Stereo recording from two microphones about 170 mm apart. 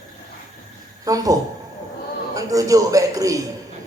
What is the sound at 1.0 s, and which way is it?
A man's voice, 20° right (ahead or behind).